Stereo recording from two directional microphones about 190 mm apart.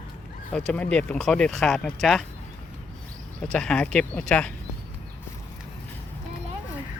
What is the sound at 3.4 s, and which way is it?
Speech, 5° left (ahead or behind).